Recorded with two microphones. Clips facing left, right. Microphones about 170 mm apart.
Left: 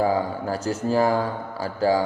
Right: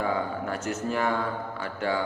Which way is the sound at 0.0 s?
35° left (ahead or behind).